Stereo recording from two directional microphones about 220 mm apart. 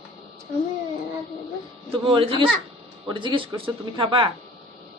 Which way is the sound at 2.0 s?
25° right (ahead or behind).